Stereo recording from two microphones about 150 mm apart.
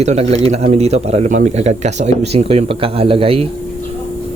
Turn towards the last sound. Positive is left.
turn(degrees=-40)  # may be behind; listen again after turning